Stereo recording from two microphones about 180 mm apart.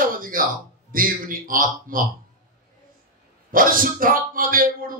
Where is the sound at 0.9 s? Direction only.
50° right (ahead or behind).